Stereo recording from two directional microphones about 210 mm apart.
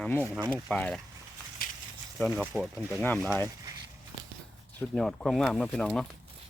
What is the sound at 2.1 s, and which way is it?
Speech, centre (ahead or behind).